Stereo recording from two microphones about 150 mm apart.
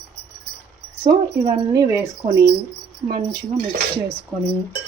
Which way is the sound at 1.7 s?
20° right (ahead or behind).